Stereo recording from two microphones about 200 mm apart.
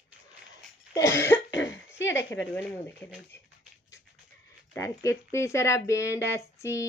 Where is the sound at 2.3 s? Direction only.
10° left (ahead or behind).